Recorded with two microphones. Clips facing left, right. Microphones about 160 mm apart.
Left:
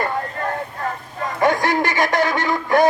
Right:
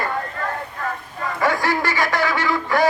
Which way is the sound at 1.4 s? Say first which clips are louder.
Left 3 dB; 20° left (ahead or behind).